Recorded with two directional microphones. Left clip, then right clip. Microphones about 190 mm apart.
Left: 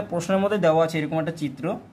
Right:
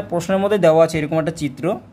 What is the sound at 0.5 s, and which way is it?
Speech, 30° right (ahead or behind).